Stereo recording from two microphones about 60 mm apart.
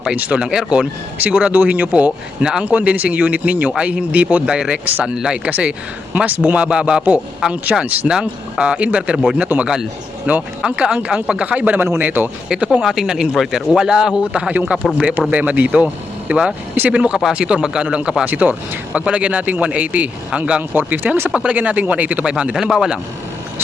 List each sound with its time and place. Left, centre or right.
0.2 s a man's voice: right
2.4 s speech: centre
2.7 s a man's voice: right
4.4 s speech: centre
5.5 s a man's voice: right
7.5 s a man's voice: right
10.3 s a man's voice: right
11.8 s speech: right
12.5 s speech: centre
12.8 s a man's voice: centre
18.3 s a man's voice: right
21.2 s a man's voice: right